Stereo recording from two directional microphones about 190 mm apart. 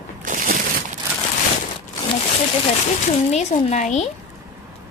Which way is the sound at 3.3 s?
35° left (ahead or behind).